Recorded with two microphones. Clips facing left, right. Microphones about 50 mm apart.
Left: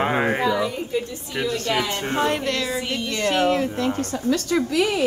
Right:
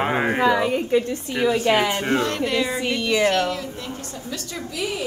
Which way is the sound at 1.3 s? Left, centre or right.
Centre.